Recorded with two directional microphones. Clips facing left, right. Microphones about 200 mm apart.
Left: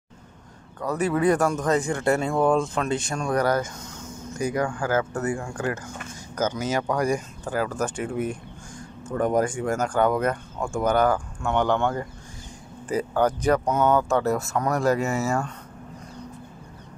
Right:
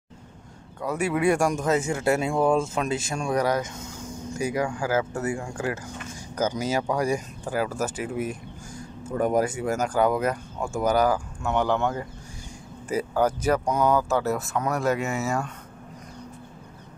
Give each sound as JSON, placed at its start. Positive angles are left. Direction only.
{"t": 0.7, "sound": "speech", "side_deg": -10}
{"t": 5.3, "sound": "speech", "side_deg": -25}
{"t": 6.7, "sound": "speech", "side_deg": -10}